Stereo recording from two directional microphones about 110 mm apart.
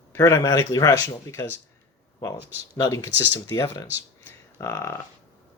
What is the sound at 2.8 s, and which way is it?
Speech, 30° left (ahead or behind).